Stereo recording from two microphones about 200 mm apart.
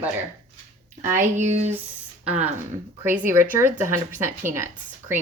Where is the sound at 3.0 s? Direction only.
10° right (ahead or behind).